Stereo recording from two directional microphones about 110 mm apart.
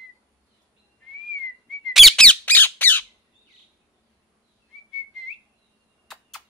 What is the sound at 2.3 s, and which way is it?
Squawk, 15° left (ahead or behind).